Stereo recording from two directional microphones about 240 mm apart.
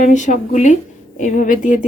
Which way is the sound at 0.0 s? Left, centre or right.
Left.